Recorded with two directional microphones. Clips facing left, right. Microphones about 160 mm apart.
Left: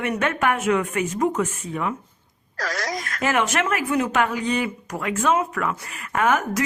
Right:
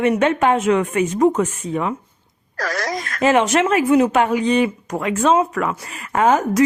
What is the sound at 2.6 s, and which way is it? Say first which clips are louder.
Speech: right 4 dB; 60° right (ahead or behind).